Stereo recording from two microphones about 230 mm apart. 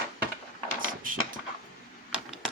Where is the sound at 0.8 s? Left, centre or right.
Right.